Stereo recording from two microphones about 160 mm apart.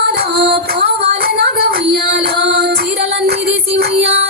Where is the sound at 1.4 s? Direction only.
75° right (ahead or behind).